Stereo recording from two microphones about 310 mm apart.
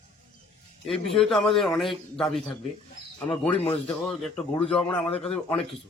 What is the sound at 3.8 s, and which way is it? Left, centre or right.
A man's voice, centre.